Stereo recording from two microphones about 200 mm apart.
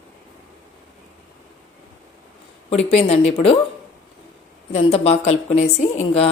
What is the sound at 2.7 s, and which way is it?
Speech, 30° left (ahead or behind).